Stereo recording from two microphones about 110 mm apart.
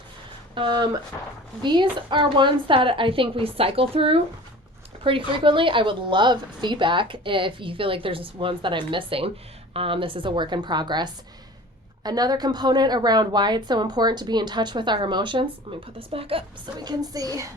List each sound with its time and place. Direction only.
0.5 s a woman's voice: 45° right (ahead or behind)
15.7 s a woman's voice: 55° right (ahead or behind)
16.7 s a woman's voice: 40° right (ahead or behind)